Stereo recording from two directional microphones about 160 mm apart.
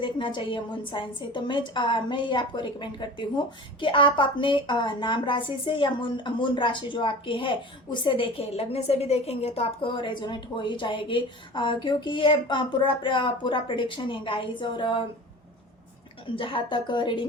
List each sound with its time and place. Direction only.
0.0 s a woman's voice: 30° left (ahead or behind)
16.3 s a woman's voice: 35° left (ahead or behind)